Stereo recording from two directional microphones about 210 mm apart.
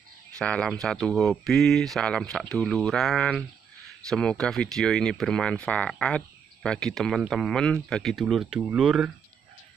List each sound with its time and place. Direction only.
0.4 s speech: 5° left (ahead or behind)